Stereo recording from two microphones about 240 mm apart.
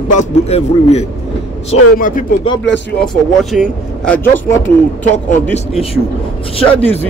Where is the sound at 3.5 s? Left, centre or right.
Centre.